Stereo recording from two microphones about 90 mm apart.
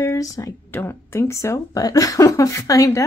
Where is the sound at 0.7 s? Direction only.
25° left (ahead or behind).